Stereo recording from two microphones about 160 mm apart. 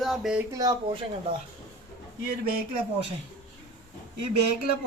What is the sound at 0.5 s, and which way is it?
Speech, 25° right (ahead or behind).